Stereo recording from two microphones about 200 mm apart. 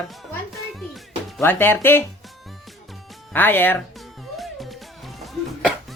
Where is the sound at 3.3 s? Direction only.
10° left (ahead or behind).